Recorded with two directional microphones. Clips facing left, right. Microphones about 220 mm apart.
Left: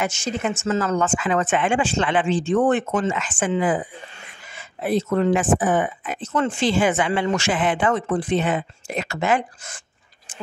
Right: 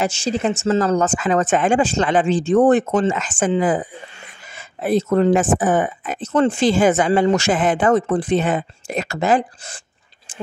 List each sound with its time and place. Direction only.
0.0 s speech: 30° right (ahead or behind)